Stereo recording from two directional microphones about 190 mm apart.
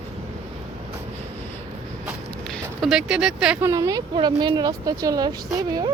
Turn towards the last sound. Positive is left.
turn(degrees=-20)  # may be behind; listen again after turning